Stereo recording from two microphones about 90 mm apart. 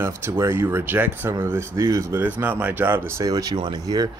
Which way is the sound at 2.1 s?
20° right (ahead or behind).